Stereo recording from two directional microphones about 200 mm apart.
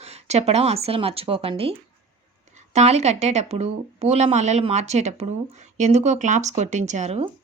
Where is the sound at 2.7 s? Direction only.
35° right (ahead or behind).